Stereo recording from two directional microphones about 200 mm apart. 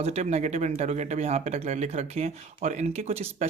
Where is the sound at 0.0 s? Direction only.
35° right (ahead or behind).